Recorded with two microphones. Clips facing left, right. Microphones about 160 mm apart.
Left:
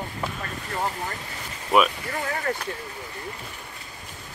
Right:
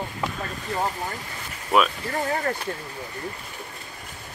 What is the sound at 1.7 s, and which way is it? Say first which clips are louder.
Speech: left 1 dB; centre (ahead or behind).